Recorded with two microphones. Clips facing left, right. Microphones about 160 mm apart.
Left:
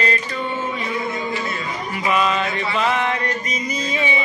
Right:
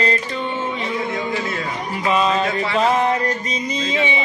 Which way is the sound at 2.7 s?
40° right (ahead or behind).